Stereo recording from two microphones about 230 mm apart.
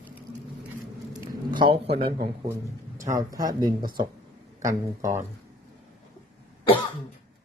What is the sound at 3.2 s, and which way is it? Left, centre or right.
Speech, centre.